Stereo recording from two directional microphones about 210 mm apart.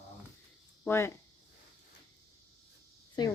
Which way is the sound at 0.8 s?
10° left (ahead or behind).